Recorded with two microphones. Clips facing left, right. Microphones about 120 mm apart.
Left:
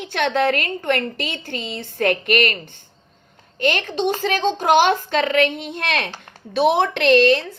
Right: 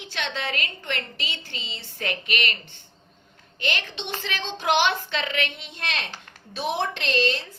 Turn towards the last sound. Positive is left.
turn(degrees=60)  # may be behind; listen again after turning